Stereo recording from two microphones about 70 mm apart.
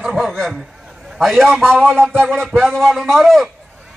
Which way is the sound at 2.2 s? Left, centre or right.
Centre.